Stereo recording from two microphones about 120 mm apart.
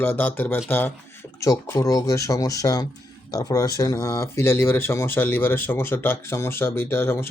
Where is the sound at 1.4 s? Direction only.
25° left (ahead or behind).